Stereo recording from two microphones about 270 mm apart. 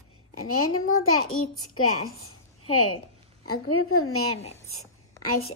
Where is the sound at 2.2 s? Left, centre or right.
Left.